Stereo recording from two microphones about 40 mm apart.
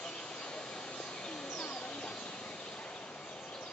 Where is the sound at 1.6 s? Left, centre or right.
Left.